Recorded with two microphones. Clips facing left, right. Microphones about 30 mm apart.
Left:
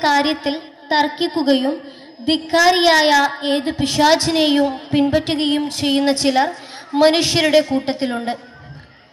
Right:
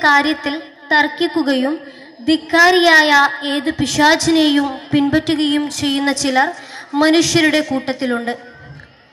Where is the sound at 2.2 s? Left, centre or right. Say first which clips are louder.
Right 3 dB; left.